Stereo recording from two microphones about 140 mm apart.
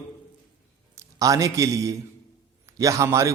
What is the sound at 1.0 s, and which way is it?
A man's voice, 25° right (ahead or behind).